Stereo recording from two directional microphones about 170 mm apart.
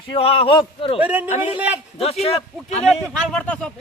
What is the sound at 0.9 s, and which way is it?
Speech, 10° right (ahead or behind).